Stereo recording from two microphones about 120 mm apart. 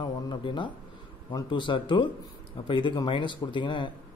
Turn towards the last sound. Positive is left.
turn(degrees=40)  # may be behind; listen again after turning